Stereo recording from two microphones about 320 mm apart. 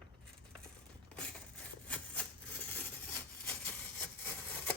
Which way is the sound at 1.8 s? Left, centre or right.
Centre.